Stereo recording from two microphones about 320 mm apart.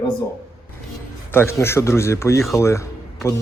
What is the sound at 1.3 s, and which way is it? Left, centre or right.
Speech, centre.